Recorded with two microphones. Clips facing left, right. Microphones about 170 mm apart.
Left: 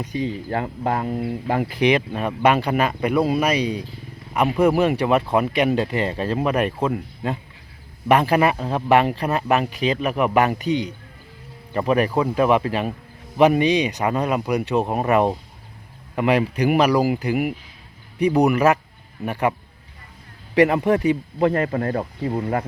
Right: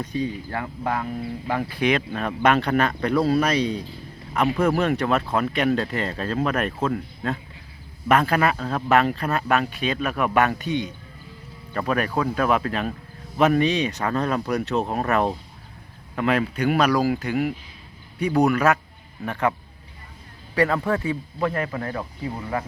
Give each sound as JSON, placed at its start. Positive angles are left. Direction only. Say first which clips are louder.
{"t": 0.0, "sound": "speech", "louder": "left 1 dB", "side_deg": 15}
{"t": 0.5, "sound": "speech", "louder": "left 4 dB", "side_deg": 30}
{"t": 11.7, "sound": "speech", "louder": "left 5 dB", "side_deg": 20}
{"t": 20.6, "sound": "speech", "louder": "left 5 dB", "side_deg": 20}